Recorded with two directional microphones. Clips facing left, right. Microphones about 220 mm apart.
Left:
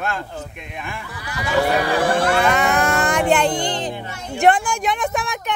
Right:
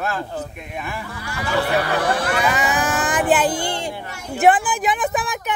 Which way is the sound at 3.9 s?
20° left (ahead or behind).